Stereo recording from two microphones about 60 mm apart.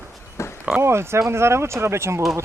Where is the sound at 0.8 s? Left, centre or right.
Right.